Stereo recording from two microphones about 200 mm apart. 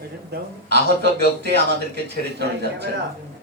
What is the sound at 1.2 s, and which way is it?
Speech, 55° right (ahead or behind).